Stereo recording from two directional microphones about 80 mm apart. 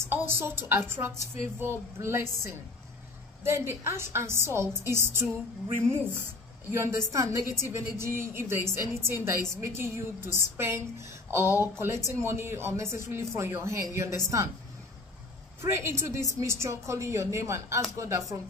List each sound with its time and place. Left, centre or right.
0.1 s a woman's voice: right
15.6 s a woman's voice: right